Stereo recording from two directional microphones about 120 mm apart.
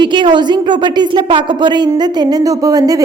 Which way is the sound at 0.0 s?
40° right (ahead or behind).